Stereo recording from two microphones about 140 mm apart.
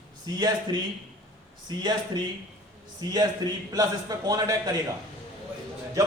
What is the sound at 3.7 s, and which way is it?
Speech, 25° right (ahead or behind).